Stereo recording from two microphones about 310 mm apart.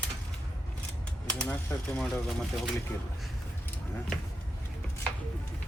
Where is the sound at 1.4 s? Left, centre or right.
Centre.